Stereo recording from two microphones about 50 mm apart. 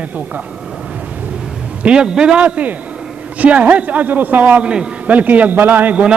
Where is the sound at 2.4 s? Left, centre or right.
Right.